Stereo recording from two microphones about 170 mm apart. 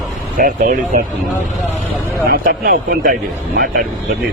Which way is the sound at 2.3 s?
60° right (ahead or behind).